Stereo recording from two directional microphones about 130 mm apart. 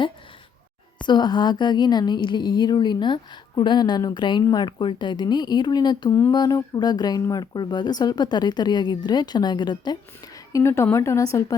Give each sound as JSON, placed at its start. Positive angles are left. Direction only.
{"t": 1.0, "sound": "speech", "side_deg": 35}
{"t": 10.5, "sound": "a woman's voice", "side_deg": 20}